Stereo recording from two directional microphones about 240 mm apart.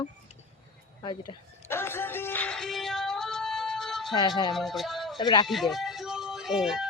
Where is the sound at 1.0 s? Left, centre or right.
Centre.